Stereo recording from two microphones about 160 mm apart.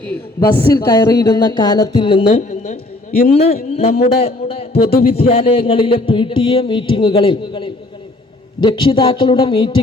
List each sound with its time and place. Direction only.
0.3 s speech: 25° left (ahead or behind)
2.3 s a woman's voice: 50° left (ahead or behind)
3.2 s a man's voice: 40° left (ahead or behind)